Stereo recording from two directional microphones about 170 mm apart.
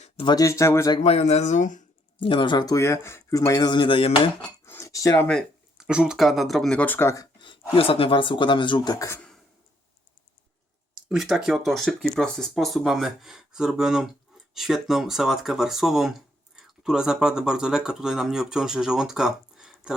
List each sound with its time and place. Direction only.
0.0 s a sound: 35° left (ahead or behind)
0.3 s speech: 20° left (ahead or behind)
1.0 s speech: 35° left (ahead or behind)
2.2 s speech: 30° left (ahead or behind)
4.6 s a sound: 15° left (ahead or behind)
5.3 s speech: centre (ahead or behind)
7.3 s speech: 30° left (ahead or behind)
11.1 s speech: centre (ahead or behind)